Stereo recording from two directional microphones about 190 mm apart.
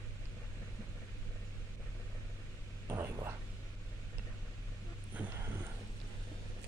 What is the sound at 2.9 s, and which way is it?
Whispering, 15° right (ahead or behind).